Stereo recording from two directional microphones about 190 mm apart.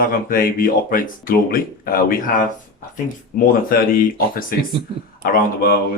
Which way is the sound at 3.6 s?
50° left (ahead or behind).